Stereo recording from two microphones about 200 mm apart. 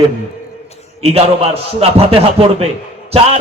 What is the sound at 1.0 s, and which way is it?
A man's voice, 30° right (ahead or behind).